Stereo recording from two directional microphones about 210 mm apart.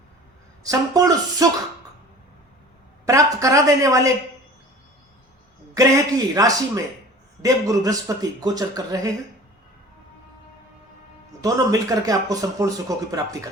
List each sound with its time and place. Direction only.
0.6 s speech: 15° right (ahead or behind)
3.1 s speech: 15° right (ahead or behind)
5.7 s speech: 15° right (ahead or behind)
11.4 s speech: 15° right (ahead or behind)